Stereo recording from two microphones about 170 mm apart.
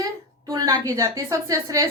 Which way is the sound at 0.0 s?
20° right (ahead or behind).